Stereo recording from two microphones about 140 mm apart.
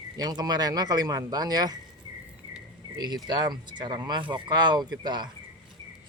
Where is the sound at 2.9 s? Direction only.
30° right (ahead or behind).